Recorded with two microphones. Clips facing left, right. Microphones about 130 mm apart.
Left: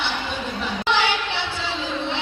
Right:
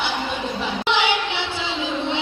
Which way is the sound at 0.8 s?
15° right (ahead or behind).